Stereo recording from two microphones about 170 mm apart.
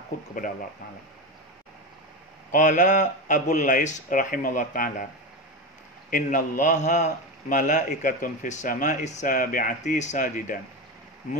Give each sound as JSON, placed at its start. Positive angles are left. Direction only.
{"t": 2.5, "sound": "a man's voice", "side_deg": 45}
{"t": 6.0, "sound": "a man's voice", "side_deg": 55}